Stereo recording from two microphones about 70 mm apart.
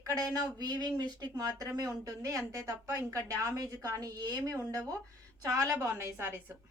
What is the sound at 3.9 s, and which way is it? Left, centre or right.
A woman's voice, right.